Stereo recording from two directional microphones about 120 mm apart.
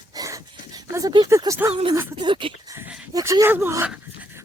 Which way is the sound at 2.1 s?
40° right (ahead or behind).